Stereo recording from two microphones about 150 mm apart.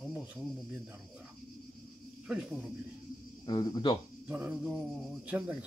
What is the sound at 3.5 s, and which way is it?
Speech, 30° left (ahead or behind).